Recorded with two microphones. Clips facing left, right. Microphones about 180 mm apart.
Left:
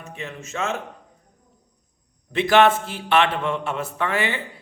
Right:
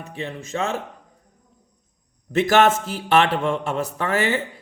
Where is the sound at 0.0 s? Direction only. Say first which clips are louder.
Right 4 dB; 35° right (ahead or behind).